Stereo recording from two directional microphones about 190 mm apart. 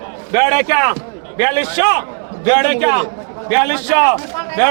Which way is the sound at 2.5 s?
5° right (ahead or behind).